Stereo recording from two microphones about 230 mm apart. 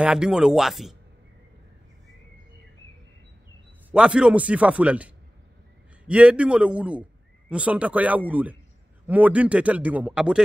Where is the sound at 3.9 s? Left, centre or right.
Centre.